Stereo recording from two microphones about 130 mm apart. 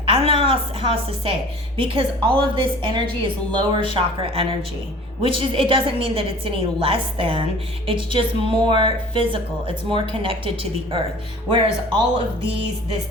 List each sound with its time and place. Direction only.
0.0 s a woman's voice: 45° right (ahead or behind)